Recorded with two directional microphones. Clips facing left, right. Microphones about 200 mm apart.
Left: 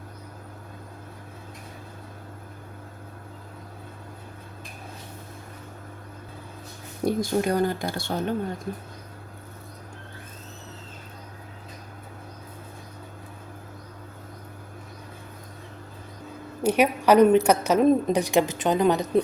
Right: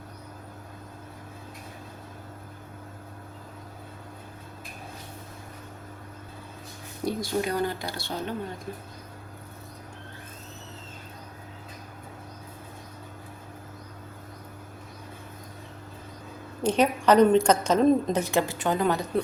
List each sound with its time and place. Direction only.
7.0 s speech: 50° left (ahead or behind)
16.6 s a woman's voice: 10° left (ahead or behind)